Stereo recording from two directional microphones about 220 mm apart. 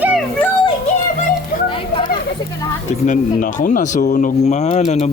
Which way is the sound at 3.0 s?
35° left (ahead or behind).